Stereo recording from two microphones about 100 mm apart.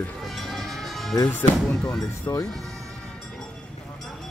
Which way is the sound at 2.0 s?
35° left (ahead or behind).